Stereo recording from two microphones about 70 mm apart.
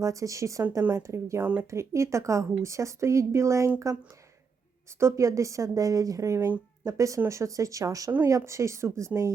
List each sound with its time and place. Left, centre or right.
0.0 s a woman's voice: right
1.4 s speech: right
1.7 s a woman's voice: right
4.9 s a woman's voice: right